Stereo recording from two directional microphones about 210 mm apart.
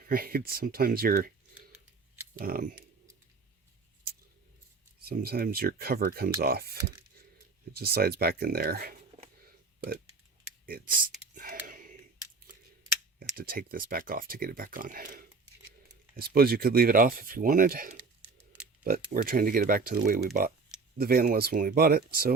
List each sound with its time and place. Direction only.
0.0 s speech: 45° right (ahead or behind)
2.4 s typing: 40° right (ahead or behind)
5.0 s speech: 45° right (ahead or behind)
10.7 s a sound: 45° right (ahead or behind)
13.1 s speech: 45° right (ahead or behind)
19.1 s speech: 40° right (ahead or behind)